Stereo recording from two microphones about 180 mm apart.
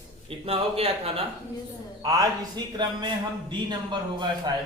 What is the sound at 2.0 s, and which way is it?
A man's voice, 20° right (ahead or behind).